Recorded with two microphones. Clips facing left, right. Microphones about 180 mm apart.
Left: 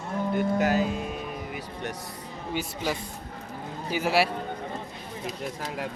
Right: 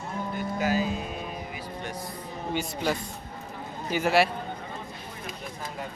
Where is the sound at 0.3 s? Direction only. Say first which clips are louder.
Left 3 dB; 60° left (ahead or behind).